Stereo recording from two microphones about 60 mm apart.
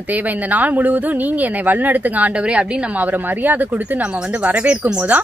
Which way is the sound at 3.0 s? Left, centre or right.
Right.